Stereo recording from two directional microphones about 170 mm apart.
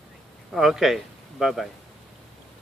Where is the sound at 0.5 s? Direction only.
Centre (ahead or behind).